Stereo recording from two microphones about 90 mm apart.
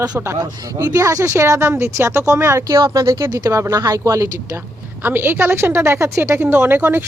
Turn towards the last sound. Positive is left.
turn(degrees=-25)  # may be behind; listen again after turning